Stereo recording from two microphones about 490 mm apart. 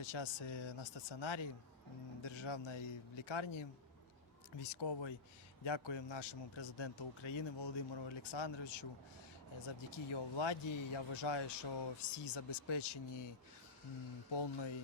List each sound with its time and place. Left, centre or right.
0.0 s a man's voice: left
9.6 s a man's voice: left
12.1 s a man's voice: left